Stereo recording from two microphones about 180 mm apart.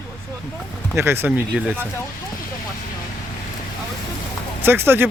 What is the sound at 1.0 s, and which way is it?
Speech, 15° right (ahead or behind).